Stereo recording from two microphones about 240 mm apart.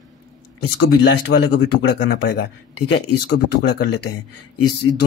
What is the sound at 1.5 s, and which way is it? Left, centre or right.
A man's voice, left.